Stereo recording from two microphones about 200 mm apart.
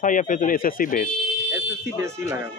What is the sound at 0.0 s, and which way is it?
Speech, 40° left (ahead or behind).